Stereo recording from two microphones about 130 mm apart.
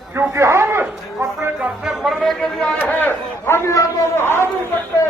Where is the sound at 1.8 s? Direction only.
Centre (ahead or behind).